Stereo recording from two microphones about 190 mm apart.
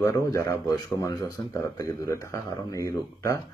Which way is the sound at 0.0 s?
15° left (ahead or behind).